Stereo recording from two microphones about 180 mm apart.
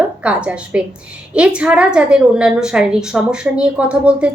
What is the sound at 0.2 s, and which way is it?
A woman's voice, 5° right (ahead or behind).